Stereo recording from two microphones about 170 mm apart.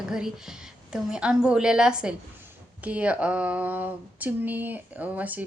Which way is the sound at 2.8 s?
10° right (ahead or behind).